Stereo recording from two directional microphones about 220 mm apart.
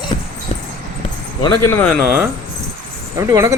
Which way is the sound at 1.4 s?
10° left (ahead or behind).